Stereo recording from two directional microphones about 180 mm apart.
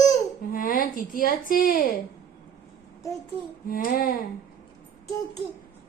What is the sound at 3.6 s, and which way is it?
Speech, 50° left (ahead or behind).